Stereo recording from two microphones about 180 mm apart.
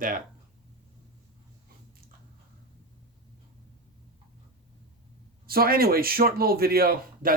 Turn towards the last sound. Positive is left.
turn(degrees=-55)  # may be behind; listen again after turning